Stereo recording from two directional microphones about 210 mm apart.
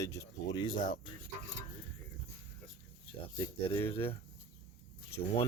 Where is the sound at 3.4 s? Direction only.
10° left (ahead or behind).